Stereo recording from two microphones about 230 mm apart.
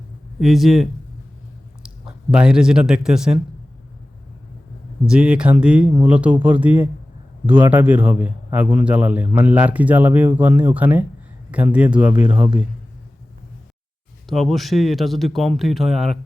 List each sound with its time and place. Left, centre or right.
0.3 s speech: centre
5.0 s a man's voice: centre
12.1 s speech: centre
14.3 s speech: centre